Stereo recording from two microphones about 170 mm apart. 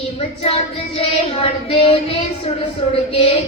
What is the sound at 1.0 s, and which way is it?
Speech, 35° left (ahead or behind).